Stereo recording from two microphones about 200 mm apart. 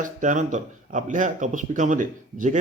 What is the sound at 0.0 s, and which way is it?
A man's voice, 40° right (ahead or behind).